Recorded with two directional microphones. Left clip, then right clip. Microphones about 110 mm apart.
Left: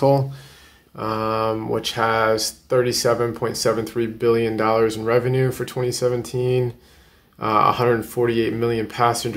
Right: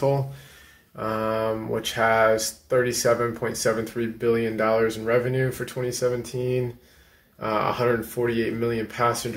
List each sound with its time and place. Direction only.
0.9 s speech: 15° left (ahead or behind); by 9.3 s 30° left (ahead or behind)